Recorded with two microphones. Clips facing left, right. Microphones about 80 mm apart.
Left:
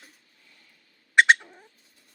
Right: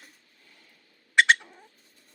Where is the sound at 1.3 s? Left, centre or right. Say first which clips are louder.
Left 2 dB; centre.